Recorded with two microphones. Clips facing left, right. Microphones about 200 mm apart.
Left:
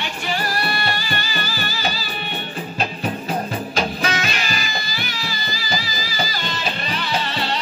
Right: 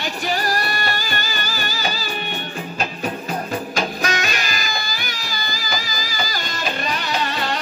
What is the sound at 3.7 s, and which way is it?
Music, 45° right (ahead or behind).